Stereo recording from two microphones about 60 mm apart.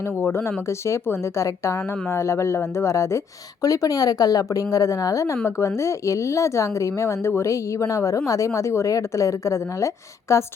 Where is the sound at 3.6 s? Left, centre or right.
Left.